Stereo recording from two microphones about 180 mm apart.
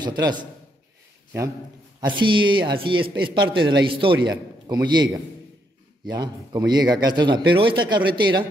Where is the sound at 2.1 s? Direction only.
25° right (ahead or behind).